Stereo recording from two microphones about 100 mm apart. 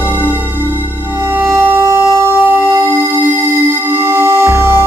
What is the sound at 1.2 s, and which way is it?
Music, 20° right (ahead or behind).